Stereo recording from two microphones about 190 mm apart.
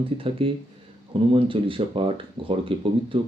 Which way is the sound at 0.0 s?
30° right (ahead or behind).